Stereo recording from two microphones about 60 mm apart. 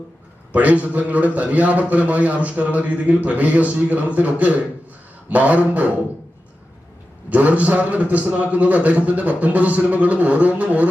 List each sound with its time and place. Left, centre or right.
0.5 s a man's voice: right
7.3 s a man's voice: right